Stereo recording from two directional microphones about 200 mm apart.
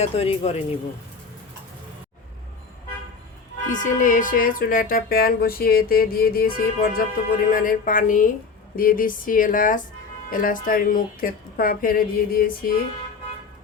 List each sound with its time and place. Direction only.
0.0 s speech: 30° left (ahead or behind)
3.7 s speech: 40° left (ahead or behind)